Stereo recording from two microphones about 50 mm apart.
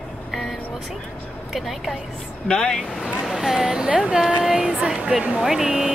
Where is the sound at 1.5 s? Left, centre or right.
Centre.